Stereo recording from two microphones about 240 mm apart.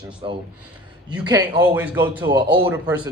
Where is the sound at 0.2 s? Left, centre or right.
Centre.